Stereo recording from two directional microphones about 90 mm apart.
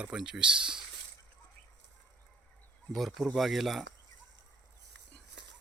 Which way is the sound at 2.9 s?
Centre (ahead or behind).